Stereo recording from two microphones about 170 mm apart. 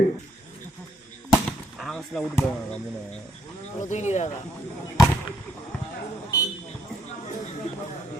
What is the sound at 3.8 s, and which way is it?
Speech, 45° left (ahead or behind).